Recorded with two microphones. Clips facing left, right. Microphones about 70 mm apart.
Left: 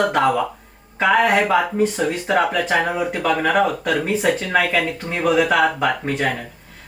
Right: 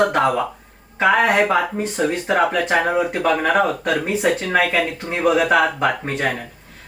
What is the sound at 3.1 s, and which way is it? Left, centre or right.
Speech, centre.